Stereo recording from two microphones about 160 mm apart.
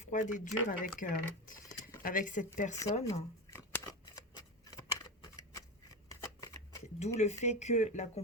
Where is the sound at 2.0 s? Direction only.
55° left (ahead or behind).